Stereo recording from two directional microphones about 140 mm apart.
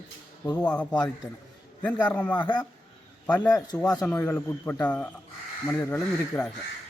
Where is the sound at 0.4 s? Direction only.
30° left (ahead or behind).